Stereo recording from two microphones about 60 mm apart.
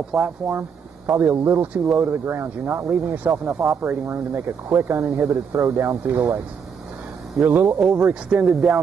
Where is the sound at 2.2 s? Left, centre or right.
Right.